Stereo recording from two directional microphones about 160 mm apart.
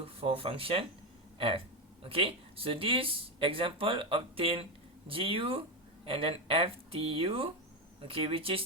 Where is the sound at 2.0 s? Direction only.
35° right (ahead or behind).